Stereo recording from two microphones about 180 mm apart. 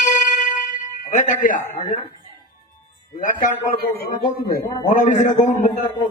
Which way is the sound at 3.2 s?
45° left (ahead or behind).